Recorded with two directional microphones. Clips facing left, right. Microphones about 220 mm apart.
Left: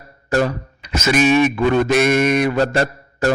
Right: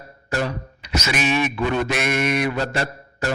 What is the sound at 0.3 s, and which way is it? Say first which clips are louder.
Speech: left 7 dB; 50° left (ahead or behind).